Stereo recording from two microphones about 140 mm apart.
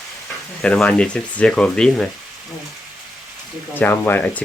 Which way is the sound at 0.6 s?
10° left (ahead or behind).